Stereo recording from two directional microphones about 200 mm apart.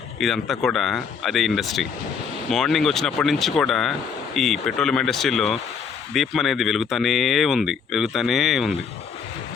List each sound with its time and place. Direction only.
0.2 s speech: centre (ahead or behind)